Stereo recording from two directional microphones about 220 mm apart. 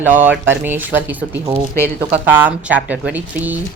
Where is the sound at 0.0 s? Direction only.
10° right (ahead or behind).